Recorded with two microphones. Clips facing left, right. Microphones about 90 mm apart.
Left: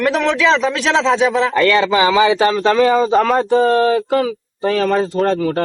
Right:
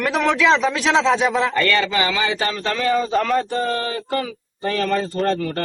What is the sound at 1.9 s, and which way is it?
Speech, 25° left (ahead or behind).